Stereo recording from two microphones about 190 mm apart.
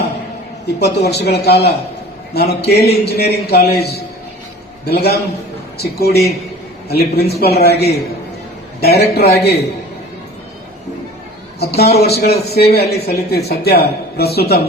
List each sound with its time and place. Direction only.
0.9 s speech: 60° left (ahead or behind)
11.6 s speech: 55° left (ahead or behind)